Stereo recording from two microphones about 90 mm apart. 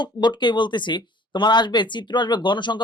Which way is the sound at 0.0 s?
55° left (ahead or behind).